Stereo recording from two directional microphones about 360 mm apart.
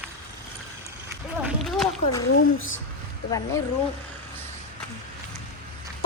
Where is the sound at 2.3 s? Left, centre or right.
Left.